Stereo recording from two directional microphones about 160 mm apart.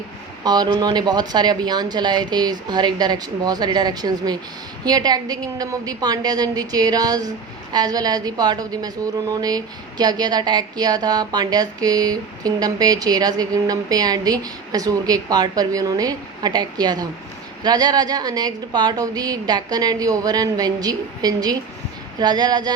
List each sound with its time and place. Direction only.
0.4 s speech: 25° right (ahead or behind)